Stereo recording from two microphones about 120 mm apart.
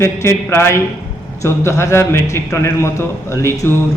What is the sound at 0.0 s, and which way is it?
A man's voice, 20° left (ahead or behind).